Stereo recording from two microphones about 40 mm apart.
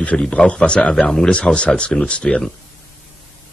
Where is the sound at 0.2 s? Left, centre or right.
Left.